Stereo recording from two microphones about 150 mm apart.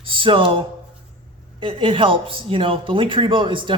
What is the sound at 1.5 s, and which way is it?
Speech, 35° right (ahead or behind).